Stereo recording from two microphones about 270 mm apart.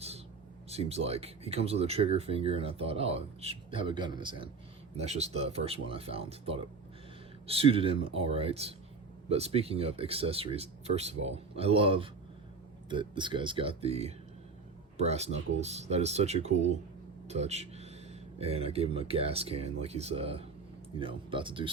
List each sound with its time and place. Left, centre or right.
0.7 s speech: right